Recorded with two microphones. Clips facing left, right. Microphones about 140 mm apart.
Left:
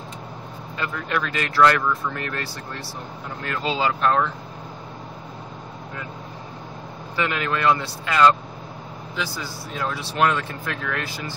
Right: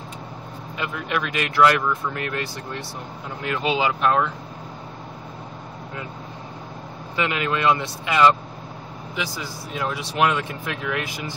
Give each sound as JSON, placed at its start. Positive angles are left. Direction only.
{"t": 0.7, "sound": "speech", "side_deg": -10}
{"t": 7.2, "sound": "speech", "side_deg": -15}